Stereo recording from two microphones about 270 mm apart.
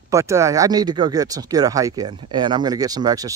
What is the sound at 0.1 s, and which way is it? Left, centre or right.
Speech, centre.